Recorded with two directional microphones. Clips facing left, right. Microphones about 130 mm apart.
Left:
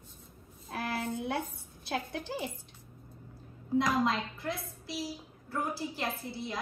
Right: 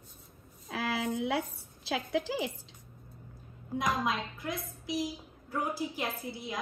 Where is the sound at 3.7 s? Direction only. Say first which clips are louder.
Left 3 dB; 20° right (ahead or behind).